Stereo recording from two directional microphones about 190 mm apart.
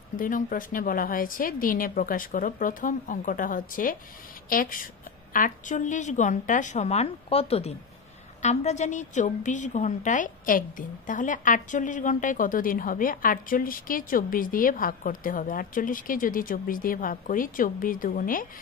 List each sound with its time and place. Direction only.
0.2 s a woman's voice: 45° left (ahead or behind)